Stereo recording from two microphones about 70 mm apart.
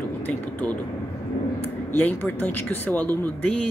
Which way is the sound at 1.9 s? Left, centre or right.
Left.